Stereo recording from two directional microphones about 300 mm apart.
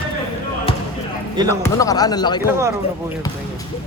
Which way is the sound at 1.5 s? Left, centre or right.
Centre.